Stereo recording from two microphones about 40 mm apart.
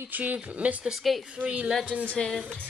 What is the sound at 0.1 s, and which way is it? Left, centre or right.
Speech, right.